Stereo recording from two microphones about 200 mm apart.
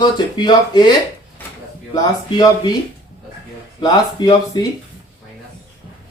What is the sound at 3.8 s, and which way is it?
Speech, 20° left (ahead or behind).